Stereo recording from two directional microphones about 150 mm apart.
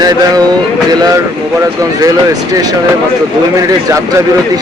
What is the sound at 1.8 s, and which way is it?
Speech, 25° right (ahead or behind).